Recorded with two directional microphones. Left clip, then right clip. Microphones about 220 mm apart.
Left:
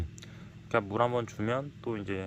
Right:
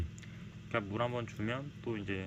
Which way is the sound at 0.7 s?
25° left (ahead or behind).